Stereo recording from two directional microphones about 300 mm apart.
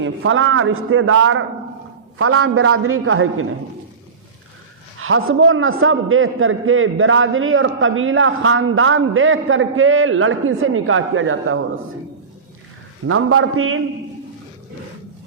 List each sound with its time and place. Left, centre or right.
0.0 s a man's voice: right
4.9 s a man's voice: right
13.1 s a man's voice: right